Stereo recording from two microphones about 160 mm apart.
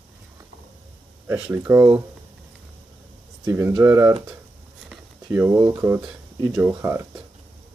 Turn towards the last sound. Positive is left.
turn(degrees=-15)  # may be behind; listen again after turning